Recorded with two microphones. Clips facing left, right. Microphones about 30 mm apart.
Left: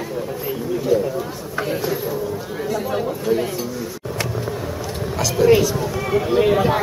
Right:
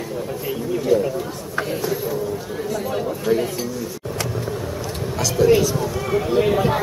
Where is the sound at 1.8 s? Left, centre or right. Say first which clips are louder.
Even; centre.